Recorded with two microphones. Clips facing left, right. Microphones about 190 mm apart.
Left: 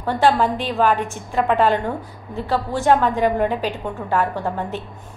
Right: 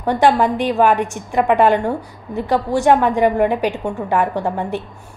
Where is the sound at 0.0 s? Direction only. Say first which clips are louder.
Right 3 dB; 15° right (ahead or behind).